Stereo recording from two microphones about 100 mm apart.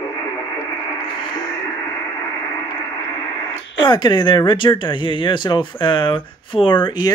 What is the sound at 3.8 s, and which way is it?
Speech, 45° left (ahead or behind).